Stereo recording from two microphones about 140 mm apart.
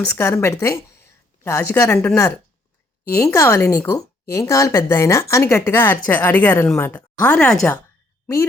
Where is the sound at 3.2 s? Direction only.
20° left (ahead or behind); by 7.8 s 5° left (ahead or behind).